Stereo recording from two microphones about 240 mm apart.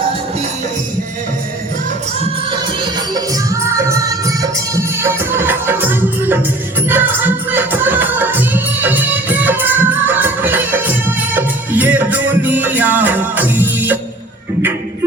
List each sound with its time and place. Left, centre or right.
2.2 s music: centre